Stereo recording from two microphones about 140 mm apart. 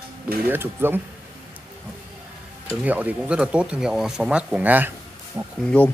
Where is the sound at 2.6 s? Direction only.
10° right (ahead or behind).